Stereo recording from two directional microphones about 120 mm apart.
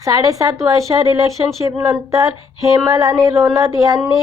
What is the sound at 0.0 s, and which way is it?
Speech, 30° right (ahead or behind).